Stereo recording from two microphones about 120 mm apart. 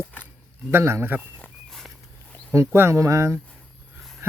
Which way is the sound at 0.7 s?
20° right (ahead or behind).